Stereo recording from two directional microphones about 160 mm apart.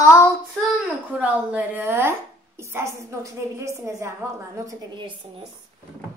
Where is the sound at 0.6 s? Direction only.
10° right (ahead or behind).